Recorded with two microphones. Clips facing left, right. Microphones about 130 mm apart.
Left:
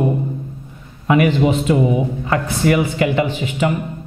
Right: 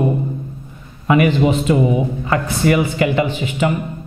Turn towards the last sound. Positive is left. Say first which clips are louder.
# even
turn(degrees=-10)  # may be behind; listen again after turning